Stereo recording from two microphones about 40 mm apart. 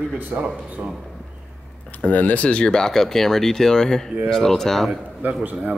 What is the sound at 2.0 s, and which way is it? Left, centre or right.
Speech, left.